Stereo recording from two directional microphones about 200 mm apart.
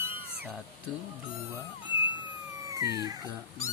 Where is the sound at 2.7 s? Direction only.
15° right (ahead or behind).